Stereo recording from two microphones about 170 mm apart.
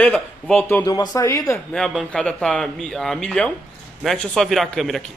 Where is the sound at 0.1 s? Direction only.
5° left (ahead or behind).